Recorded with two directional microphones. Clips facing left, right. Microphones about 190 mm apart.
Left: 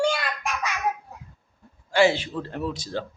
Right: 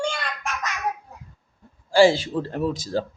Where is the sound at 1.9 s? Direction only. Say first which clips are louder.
Right 4 dB; 30° right (ahead or behind).